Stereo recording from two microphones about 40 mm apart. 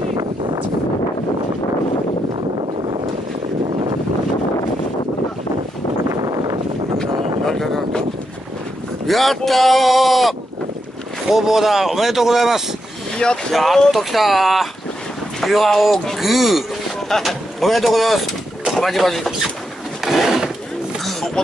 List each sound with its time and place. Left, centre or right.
7.0 s a sound: centre
9.0 s speech: centre
13.1 s speech: left
13.5 s speech: centre
20.0 s a sound: centre
21.0 s music: centre